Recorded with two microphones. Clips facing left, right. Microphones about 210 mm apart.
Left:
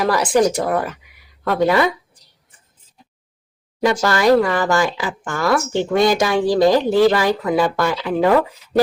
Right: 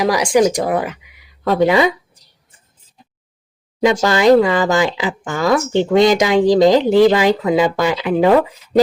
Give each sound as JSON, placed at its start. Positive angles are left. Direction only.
{"t": 0.0, "sound": "speech", "side_deg": -10}
{"t": 3.8, "sound": "speech", "side_deg": -20}